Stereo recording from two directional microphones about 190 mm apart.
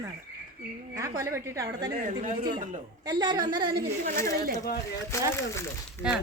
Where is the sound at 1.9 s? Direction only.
45° right (ahead or behind).